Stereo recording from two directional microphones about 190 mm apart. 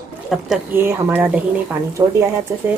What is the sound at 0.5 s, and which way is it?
Speech, 10° right (ahead or behind).